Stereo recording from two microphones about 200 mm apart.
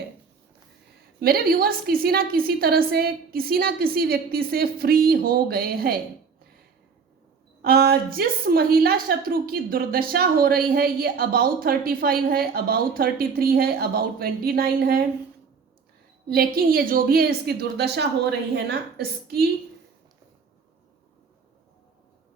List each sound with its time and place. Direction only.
1.2 s a woman's voice: 50° right (ahead or behind)
7.6 s a woman's voice: 50° right (ahead or behind)
16.3 s a woman's voice: 50° right (ahead or behind)